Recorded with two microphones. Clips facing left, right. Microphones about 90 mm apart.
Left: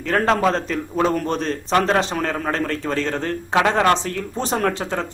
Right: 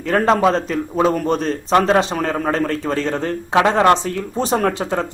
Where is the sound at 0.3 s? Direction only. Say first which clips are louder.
Right 3 dB; 5° right (ahead or behind).